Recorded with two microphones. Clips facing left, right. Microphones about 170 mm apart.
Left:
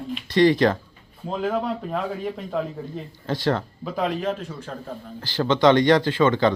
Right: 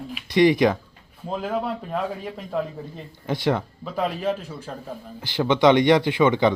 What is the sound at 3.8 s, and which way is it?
Speech, centre (ahead or behind).